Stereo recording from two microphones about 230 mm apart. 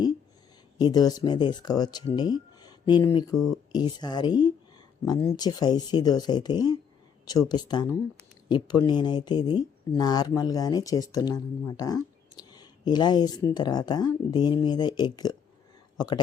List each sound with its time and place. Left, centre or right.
0.8 s speech: centre
3.3 s speech: centre
3.7 s a man's voice: centre